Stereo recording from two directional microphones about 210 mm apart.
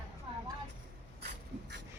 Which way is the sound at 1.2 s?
55° right (ahead or behind).